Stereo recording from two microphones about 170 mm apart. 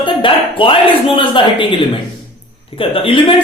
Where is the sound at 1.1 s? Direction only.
30° left (ahead or behind).